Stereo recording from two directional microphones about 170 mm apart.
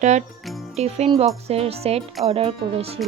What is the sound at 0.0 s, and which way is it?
Music, 45° right (ahead or behind).